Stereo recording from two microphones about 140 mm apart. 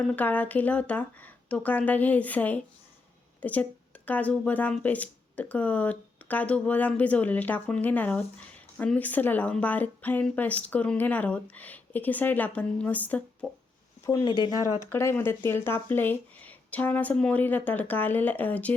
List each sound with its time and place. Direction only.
0.0 s speech: 10° left (ahead or behind)
14.3 s speech: 30° left (ahead or behind)
14.9 s speech: 15° left (ahead or behind)